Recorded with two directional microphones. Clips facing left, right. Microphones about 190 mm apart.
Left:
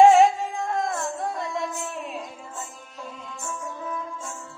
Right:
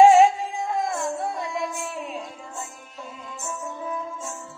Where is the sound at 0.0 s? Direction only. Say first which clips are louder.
Right 1 dB; centre (ahead or behind).